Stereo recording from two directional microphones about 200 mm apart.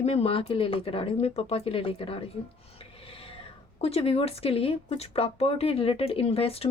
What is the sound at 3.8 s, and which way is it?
Speech, 30° left (ahead or behind).